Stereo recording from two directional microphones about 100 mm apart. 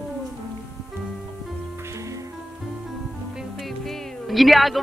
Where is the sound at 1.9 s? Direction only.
30° right (ahead or behind).